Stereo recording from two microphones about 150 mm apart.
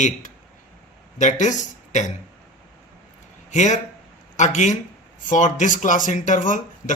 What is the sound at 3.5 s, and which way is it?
Speech, 50° left (ahead or behind).